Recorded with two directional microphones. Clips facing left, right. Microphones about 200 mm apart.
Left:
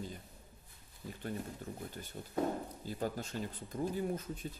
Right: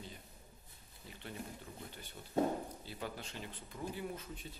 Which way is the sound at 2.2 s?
40° left (ahead or behind).